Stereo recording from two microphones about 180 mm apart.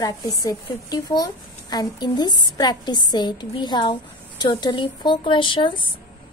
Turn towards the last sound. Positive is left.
turn(degrees=25)  # may be behind; listen again after turning